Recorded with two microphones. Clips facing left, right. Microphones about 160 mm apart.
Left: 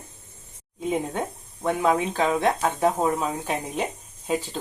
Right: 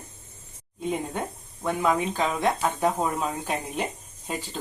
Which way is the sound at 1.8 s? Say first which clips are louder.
Left 2 dB; 30° left (ahead or behind).